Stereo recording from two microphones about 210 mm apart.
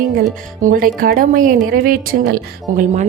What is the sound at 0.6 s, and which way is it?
Speech, 45° right (ahead or behind).